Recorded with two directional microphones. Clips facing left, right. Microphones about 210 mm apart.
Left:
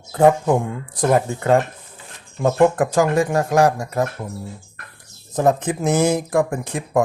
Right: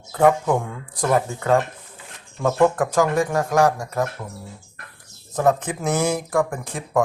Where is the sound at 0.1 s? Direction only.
30° left (ahead or behind).